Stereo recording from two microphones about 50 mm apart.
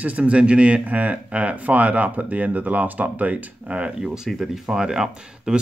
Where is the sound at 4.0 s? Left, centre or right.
Centre.